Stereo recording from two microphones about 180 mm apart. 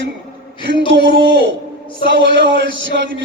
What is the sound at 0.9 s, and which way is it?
A man's voice, 70° right (ahead or behind).